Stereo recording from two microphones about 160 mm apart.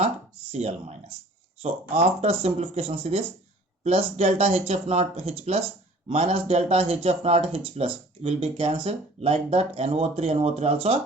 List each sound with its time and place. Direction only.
0.5 s speech: 45° right (ahead or behind)